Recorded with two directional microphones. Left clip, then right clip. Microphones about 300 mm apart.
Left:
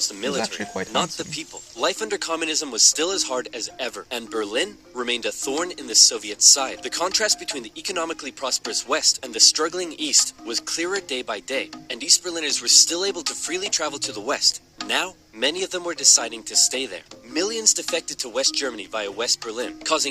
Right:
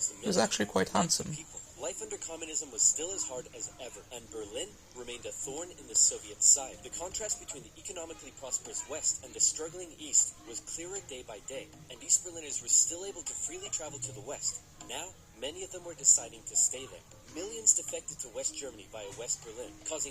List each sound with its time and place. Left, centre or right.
0.3 s speech: centre
1.4 s speech: left